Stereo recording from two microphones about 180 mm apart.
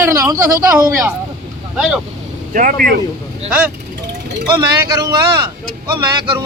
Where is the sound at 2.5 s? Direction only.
50° right (ahead or behind).